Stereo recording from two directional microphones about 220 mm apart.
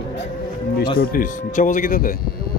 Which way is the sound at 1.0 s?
40° left (ahead or behind).